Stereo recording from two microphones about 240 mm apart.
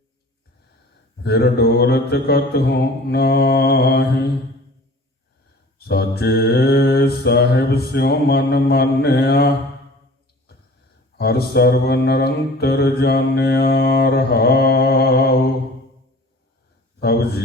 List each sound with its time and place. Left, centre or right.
1.2 s mantra: left
5.8 s mantra: left
11.2 s mantra: left
17.0 s mantra: left